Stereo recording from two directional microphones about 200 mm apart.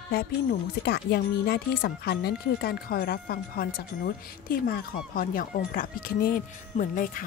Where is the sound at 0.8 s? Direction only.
50° left (ahead or behind).